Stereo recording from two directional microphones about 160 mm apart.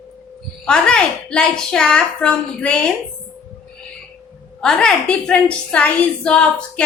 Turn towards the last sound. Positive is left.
turn(degrees=5)  # may be behind; listen again after turning